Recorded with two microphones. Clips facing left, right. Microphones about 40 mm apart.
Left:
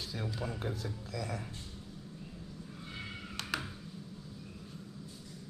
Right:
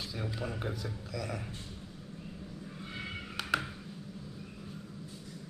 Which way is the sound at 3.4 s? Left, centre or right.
Centre.